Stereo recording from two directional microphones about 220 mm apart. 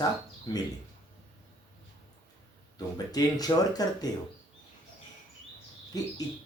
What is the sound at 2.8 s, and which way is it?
Speech, 15° left (ahead or behind).